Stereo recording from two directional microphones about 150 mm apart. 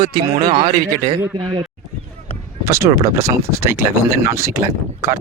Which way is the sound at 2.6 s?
20° right (ahead or behind).